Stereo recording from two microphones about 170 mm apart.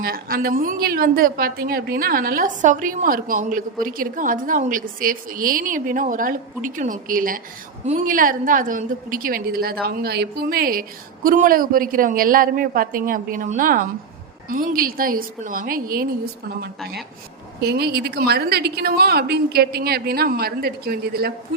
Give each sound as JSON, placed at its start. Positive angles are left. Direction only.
{"t": 0.0, "sound": "a woman's voice", "side_deg": -60}